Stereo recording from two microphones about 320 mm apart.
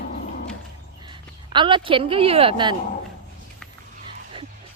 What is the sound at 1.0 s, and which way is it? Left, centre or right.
A woman's voice, centre.